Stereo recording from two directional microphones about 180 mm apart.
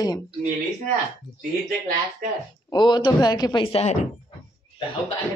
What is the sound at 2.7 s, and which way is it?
A woman's voice, 25° left (ahead or behind).